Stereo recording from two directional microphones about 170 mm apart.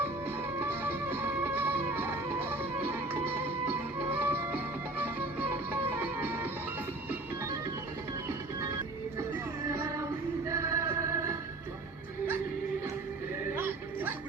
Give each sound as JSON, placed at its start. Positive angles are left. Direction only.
{"t": 0.6, "sound": "music", "side_deg": -10}
{"t": 9.6, "sound": "music", "side_deg": -15}